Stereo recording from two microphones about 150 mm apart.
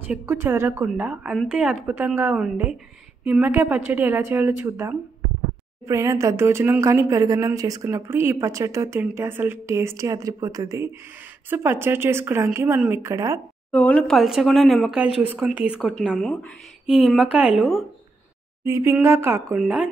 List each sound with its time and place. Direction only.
0.0 s speech: 15° right (ahead or behind)
13.7 s speech: 10° left (ahead or behind)
18.6 s speech: 20° right (ahead or behind)
19.5 s speech: 5° right (ahead or behind)